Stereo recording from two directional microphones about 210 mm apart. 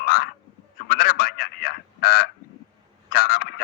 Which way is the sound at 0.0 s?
45° left (ahead or behind).